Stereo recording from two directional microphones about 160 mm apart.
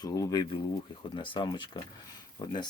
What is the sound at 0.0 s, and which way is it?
Speech, 25° left (ahead or behind).